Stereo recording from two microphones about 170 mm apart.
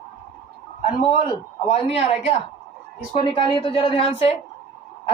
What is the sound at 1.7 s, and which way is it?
Speech, 40° left (ahead or behind).